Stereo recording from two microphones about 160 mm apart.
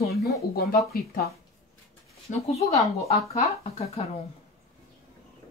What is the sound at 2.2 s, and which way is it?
Speech, 40° left (ahead or behind).